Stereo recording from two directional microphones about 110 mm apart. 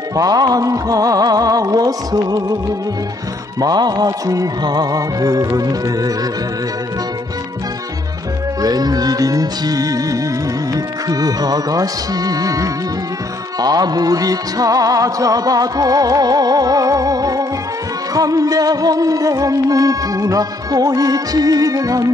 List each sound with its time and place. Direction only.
0.1 s music: 35° right (ahead or behind)
3.6 s music: 40° right (ahead or behind)
8.6 s music: 35° right (ahead or behind)